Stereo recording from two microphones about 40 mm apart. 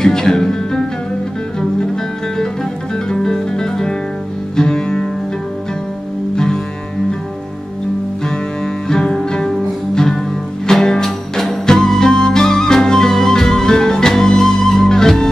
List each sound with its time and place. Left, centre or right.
0.0 s music: centre
3.1 s music: centre
6.3 s music: centre
8.8 s music: centre
11.6 s music: centre